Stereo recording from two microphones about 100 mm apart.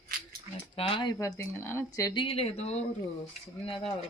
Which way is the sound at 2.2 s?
70° left (ahead or behind).